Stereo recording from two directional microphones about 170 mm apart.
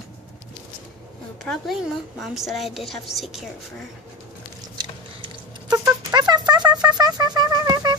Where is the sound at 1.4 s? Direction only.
Centre (ahead or behind).